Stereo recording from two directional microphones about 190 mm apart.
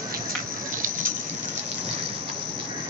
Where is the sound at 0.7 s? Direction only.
45° right (ahead or behind).